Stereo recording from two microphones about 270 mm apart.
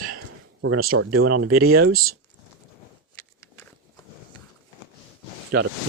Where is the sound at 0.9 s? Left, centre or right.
Right.